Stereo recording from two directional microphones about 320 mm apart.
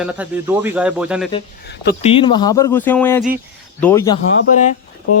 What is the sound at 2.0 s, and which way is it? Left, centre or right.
Speech, centre.